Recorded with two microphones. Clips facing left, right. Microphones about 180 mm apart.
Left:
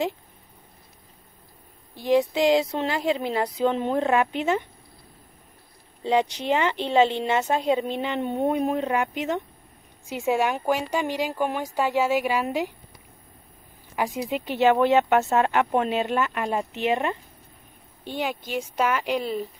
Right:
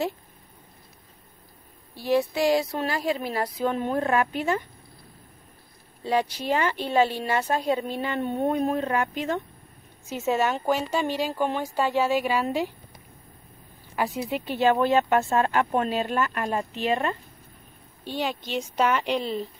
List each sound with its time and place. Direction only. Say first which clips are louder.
2.0 s speech: left 2 dB; 20° left (ahead or behind)
6.0 s speech: left 2 dB; 20° left (ahead or behind)
13.9 s speech: left 1 dB; 10° left (ahead or behind)